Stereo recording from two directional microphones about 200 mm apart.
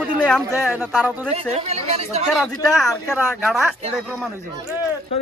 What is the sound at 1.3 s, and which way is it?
Speech, 30° right (ahead or behind).